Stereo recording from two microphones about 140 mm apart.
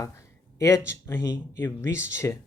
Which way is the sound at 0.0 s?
20° left (ahead or behind).